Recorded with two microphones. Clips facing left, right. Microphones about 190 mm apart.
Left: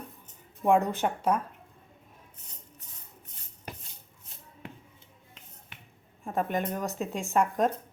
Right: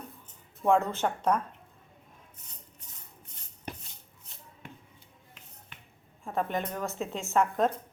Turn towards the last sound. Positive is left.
turn(degrees=15)  # may be behind; listen again after turning